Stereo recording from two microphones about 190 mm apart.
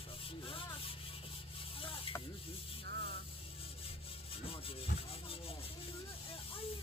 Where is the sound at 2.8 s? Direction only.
60° right (ahead or behind).